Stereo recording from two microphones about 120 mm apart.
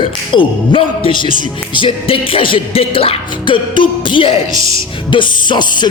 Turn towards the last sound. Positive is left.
turn(degrees=40)  # may be behind; listen again after turning